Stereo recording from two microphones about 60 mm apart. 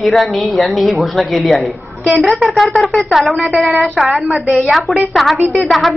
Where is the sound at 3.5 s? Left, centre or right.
Right.